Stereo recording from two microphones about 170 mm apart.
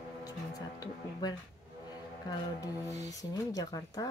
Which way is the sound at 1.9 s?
25° left (ahead or behind).